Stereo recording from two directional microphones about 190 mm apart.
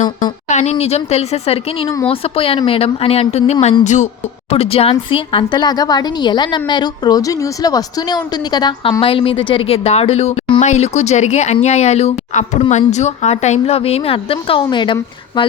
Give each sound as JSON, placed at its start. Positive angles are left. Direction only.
{"t": 0.0, "sound": "a woman's voice", "side_deg": 40}